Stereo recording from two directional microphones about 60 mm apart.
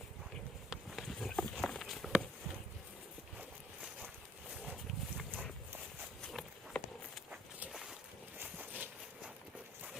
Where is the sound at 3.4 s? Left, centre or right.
Centre.